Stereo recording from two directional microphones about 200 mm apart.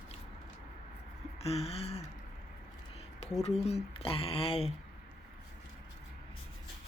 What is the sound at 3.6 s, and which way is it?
Speech, 30° left (ahead or behind).